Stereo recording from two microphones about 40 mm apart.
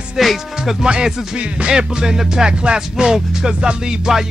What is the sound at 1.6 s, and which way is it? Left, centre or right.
Music, centre.